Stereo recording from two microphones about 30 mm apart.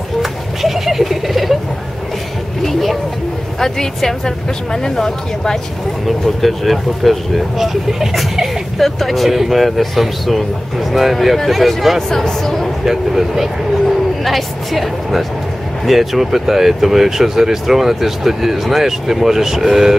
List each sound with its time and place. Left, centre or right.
0.2 s a sound: centre
2.6 s vehicle: centre
3.5 s a woman's voice: centre
6.0 s speech: centre
12.2 s a woman's voice: centre
12.8 s speech: centre
14.2 s speech: centre